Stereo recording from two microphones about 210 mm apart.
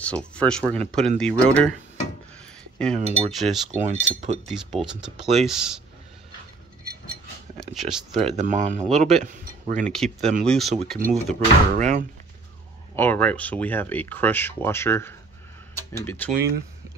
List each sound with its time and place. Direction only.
0.0 s speech: 5° left (ahead or behind)
3.0 s speech: 30° right (ahead or behind)
3.3 s speech: centre (ahead or behind)
3.7 s speech: 30° right (ahead or behind)
4.5 s speech: centre (ahead or behind)
7.6 s speech: centre (ahead or behind)
8.4 s speech: 35° right (ahead or behind)
9.8 s speech: centre (ahead or behind)
11.0 s speech: 40° right (ahead or behind)
12.9 s speech: 10° left (ahead or behind)